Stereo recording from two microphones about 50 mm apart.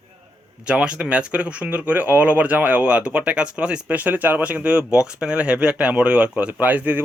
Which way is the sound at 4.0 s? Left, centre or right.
Right.